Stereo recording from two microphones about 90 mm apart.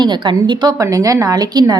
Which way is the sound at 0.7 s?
40° right (ahead or behind).